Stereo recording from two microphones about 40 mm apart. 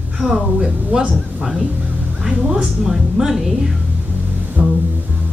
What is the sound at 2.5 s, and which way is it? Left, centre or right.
A woman's voice, centre.